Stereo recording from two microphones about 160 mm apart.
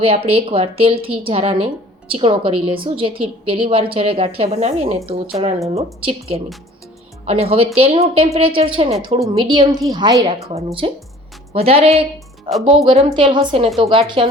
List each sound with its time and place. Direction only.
0.0 s a woman's voice: 35° right (ahead or behind)
9.2 s a woman's voice: 25° right (ahead or behind)
10.5 s a woman's voice: 40° right (ahead or behind)